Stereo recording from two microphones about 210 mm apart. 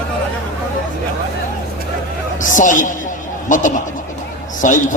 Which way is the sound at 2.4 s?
40° left (ahead or behind).